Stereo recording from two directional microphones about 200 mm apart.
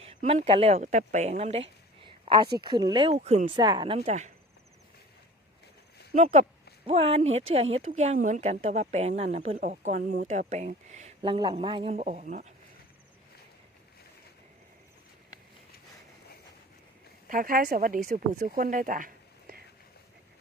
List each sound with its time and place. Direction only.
0.0 s speech: 30° right (ahead or behind)
2.0 s a sound: 25° right (ahead or behind)
2.6 s speech: 20° right (ahead or behind)
6.1 s speech: 35° right (ahead or behind)
17.2 s speech: 45° right (ahead or behind)